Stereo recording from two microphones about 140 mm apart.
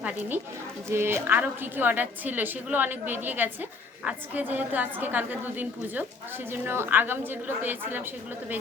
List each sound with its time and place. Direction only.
0.0 s a woman's voice: 10° right (ahead or behind)